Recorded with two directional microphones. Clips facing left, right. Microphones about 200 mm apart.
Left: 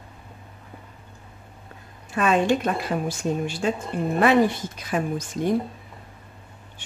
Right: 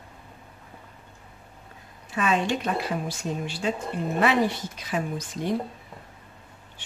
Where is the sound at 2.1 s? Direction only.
50° left (ahead or behind).